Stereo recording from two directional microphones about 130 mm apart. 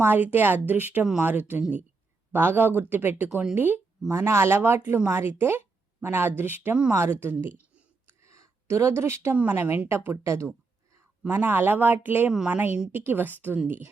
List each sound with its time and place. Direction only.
0.0 s speech: 15° right (ahead or behind)
8.0 s speech: 25° right (ahead or behind)